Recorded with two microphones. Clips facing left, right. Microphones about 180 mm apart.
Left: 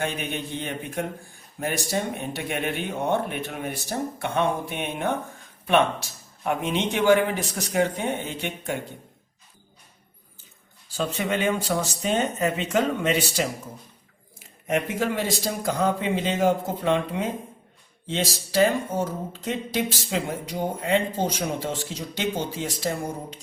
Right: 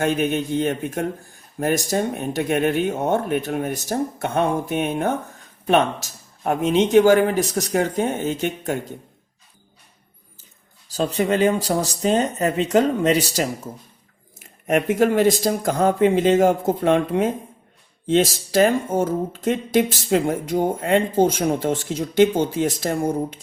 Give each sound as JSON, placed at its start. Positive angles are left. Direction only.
{"t": 0.0, "sound": "a man's voice", "side_deg": -45}
{"t": 10.8, "sound": "a man's voice", "side_deg": -35}
{"t": 14.7, "sound": "speech", "side_deg": -50}